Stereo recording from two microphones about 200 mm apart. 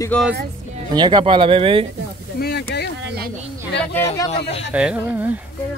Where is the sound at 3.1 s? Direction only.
50° right (ahead or behind).